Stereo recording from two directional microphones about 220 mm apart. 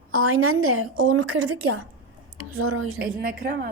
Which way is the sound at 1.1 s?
90° right.